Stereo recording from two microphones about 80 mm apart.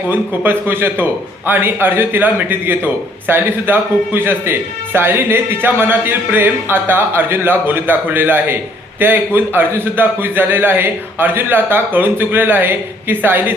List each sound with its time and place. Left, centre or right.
0.1 s a man's voice: right